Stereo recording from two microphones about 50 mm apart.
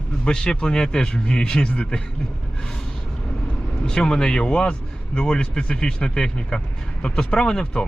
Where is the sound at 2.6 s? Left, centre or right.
Centre.